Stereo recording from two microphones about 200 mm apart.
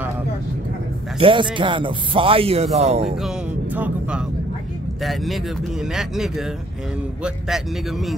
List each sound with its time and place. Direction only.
1.2 s speech: 25° right (ahead or behind)
3.2 s music: 5° right (ahead or behind)
5.0 s speech: centre (ahead or behind)